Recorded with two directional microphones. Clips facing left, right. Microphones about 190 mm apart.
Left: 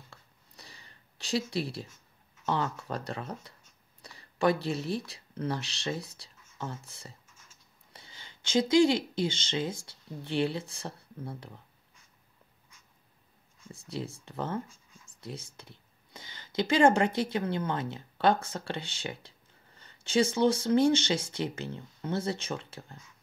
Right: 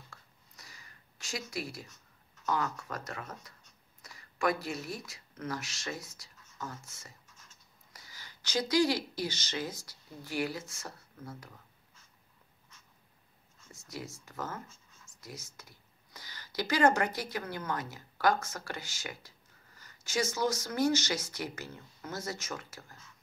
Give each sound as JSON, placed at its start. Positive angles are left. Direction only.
{"t": 0.1, "sound": "a sound", "side_deg": 30}
{"t": 1.5, "sound": "speech", "side_deg": 30}
{"t": 13.7, "sound": "speech", "side_deg": 30}